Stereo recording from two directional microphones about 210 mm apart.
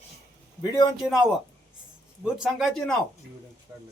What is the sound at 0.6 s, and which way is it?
Speech, 20° left (ahead or behind).